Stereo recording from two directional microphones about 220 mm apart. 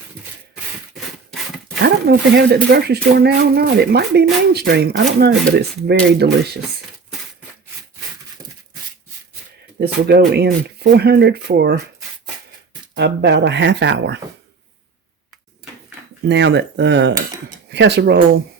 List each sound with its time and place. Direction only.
1.8 s speech: 50° right (ahead or behind)
9.8 s speech: 45° right (ahead or behind)
12.9 s speech: 50° right (ahead or behind)
16.2 s speech: 50° right (ahead or behind)